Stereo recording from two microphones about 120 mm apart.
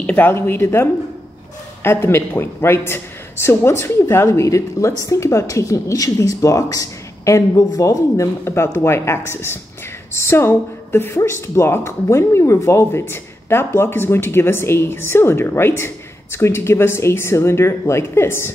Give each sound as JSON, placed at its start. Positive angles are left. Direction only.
{"t": 0.0, "sound": "speech", "side_deg": 15}